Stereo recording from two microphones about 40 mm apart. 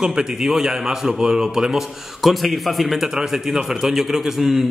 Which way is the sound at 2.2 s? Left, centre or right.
Centre.